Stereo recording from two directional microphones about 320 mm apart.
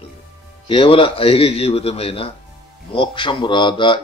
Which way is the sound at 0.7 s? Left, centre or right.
Centre.